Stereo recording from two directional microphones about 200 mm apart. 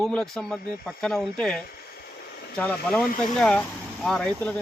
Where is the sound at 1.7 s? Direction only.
50° left (ahead or behind).